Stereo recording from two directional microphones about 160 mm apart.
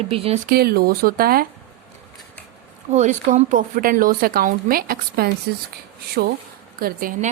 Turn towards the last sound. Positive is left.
turn(degrees=-60)  # may be behind; listen again after turning